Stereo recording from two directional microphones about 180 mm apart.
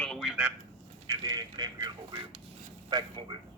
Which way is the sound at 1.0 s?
20° right (ahead or behind).